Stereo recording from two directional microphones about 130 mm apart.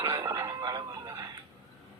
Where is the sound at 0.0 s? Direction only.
20° right (ahead or behind).